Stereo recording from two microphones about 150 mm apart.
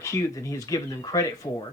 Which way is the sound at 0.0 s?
20° left (ahead or behind).